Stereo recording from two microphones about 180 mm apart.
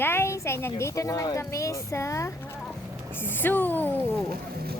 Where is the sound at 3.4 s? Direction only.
10° left (ahead or behind).